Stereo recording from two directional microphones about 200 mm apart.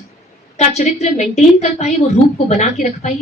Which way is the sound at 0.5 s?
35° left (ahead or behind).